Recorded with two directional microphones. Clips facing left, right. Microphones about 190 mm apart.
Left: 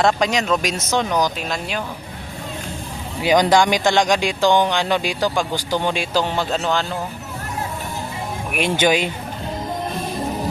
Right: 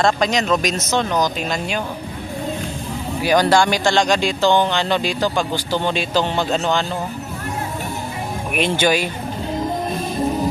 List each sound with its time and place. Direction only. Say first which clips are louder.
0.0 s speech: even; 10° left (ahead or behind)
3.2 s speech: even; 15° left (ahead or behind)
8.5 s speech: even; 15° left (ahead or behind)